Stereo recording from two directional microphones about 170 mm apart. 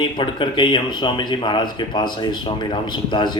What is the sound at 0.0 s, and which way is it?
Speech, 30° left (ahead or behind).